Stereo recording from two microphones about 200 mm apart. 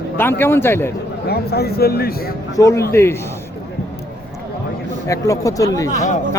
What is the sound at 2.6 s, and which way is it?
Speech, 15° left (ahead or behind).